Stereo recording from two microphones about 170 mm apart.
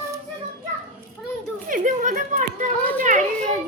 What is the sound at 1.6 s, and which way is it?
A child's voice, 50° right (ahead or behind).